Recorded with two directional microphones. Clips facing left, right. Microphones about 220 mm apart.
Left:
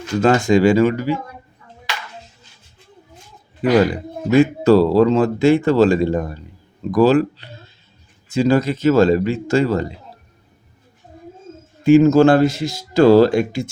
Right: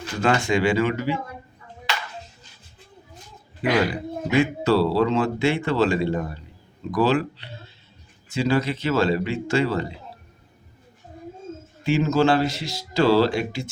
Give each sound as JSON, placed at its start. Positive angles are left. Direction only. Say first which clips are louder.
{"t": 0.2, "sound": "speech", "louder": "left 7 dB", "side_deg": 40}
{"t": 4.3, "sound": "speech", "louder": "left 8 dB", "side_deg": 45}
{"t": 11.8, "sound": "speech", "louder": "left 10 dB", "side_deg": 45}